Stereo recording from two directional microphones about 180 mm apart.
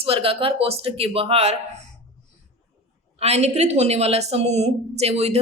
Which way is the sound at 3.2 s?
35° right (ahead or behind).